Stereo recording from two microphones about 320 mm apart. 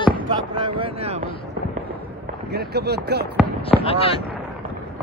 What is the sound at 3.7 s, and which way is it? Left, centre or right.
Speech, centre.